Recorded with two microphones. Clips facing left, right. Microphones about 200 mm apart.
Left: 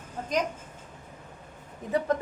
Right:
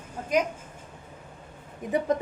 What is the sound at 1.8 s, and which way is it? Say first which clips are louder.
Speech: right 1 dB; 15° right (ahead or behind).